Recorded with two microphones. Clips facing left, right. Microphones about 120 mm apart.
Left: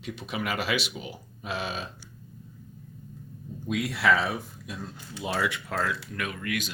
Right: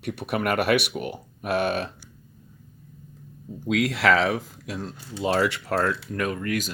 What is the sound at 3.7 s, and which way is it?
Speech, 90° right.